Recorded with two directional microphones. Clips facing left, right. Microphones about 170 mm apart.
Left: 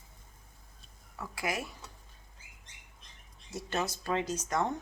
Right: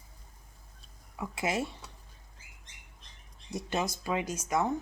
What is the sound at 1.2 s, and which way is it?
Speech, 25° right (ahead or behind).